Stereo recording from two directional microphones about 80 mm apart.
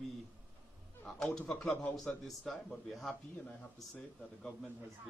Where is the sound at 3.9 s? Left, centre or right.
Centre.